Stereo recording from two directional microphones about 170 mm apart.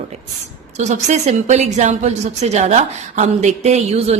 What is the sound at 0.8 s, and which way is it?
A woman's voice, 45° right (ahead or behind).